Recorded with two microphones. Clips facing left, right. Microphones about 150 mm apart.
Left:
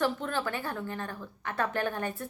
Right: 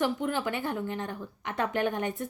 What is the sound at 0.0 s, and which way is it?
A woman's voice, 15° right (ahead or behind).